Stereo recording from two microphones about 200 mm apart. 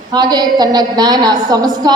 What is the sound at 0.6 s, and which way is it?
A woman's voice, 20° right (ahead or behind).